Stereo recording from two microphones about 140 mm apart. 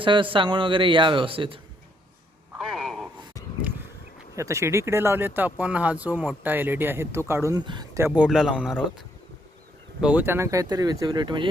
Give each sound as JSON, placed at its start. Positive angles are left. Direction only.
{"t": 0.0, "sound": "speech", "side_deg": -35}
{"t": 2.6, "sound": "a sound", "side_deg": 0}
{"t": 3.4, "sound": "a sound", "side_deg": 25}
{"t": 4.4, "sound": "speech", "side_deg": -20}
{"t": 7.6, "sound": "speech", "side_deg": -35}
{"t": 7.9, "sound": "speech", "side_deg": -15}
{"t": 10.0, "sound": "speech", "side_deg": -10}